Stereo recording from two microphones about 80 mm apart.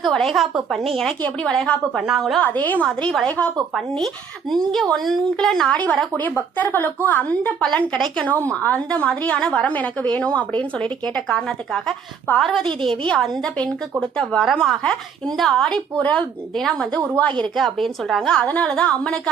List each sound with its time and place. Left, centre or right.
0.0 s a woman's voice: centre
2.4 s a woman's voice: left
3.8 s a woman's voice: centre